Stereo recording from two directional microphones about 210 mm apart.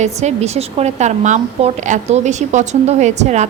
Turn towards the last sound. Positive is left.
turn(degrees=-35)  # may be behind; listen again after turning